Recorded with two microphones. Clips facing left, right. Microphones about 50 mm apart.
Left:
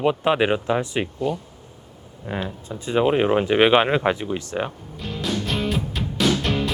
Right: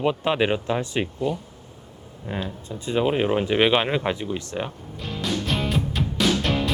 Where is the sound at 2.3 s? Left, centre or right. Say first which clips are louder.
Left 2 dB; centre.